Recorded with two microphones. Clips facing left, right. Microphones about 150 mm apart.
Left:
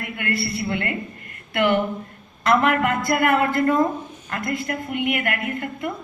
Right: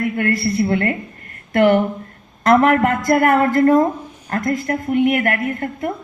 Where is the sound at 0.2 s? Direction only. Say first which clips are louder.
Right 5 dB; 40° right (ahead or behind).